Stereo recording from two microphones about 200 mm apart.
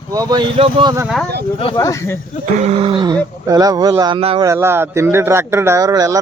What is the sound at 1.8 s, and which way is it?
Speech, 15° left (ahead or behind).